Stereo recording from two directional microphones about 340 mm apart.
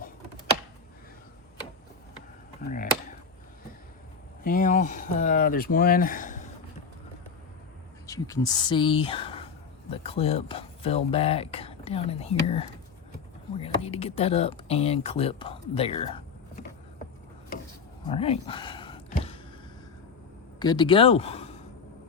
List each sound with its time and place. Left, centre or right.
2.6 s speech: left
4.4 s speech: left
8.0 s speech: centre
18.0 s a sound: centre
20.6 s speech: centre